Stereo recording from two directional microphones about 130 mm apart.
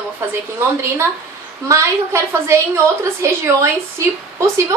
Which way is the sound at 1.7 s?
20° right (ahead or behind).